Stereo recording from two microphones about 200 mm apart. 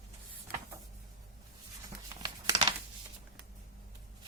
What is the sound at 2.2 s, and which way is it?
Crumpling, 25° right (ahead or behind).